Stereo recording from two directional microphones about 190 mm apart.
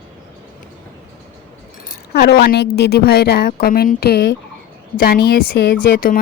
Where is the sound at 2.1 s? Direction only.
55° left (ahead or behind).